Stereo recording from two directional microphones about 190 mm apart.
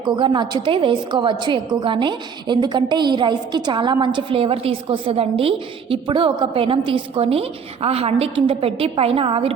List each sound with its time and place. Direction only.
0.0 s a woman's voice: 25° right (ahead or behind)